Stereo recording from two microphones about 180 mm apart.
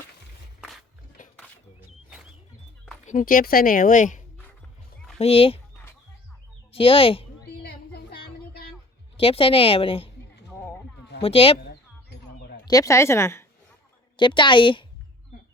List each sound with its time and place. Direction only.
0.6 s music: centre (ahead or behind)
1.2 s a sound: 45° left (ahead or behind)
3.1 s speech: 50° left (ahead or behind)
5.1 s a woman's voice: 35° left (ahead or behind)
6.7 s speech: 30° left (ahead or behind)
7.6 s a sound: 60° left (ahead or behind)
9.1 s a woman's voice: 30° left (ahead or behind)
11.2 s a woman's voice: 30° left (ahead or behind)
12.1 s a sound: 65° left (ahead or behind)
12.6 s speech: 20° left (ahead or behind)
14.2 s a woman's voice: 25° left (ahead or behind)